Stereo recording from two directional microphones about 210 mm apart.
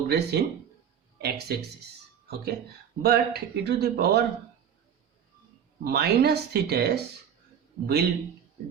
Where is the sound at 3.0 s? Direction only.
50° right (ahead or behind).